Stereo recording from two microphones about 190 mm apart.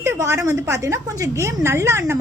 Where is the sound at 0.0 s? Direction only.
15° right (ahead or behind).